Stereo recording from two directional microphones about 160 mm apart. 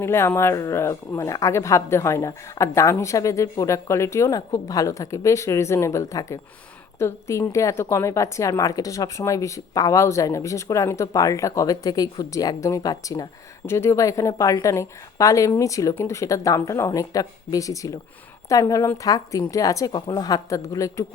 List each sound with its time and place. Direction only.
0.0 s a woman's voice: 15° left (ahead or behind)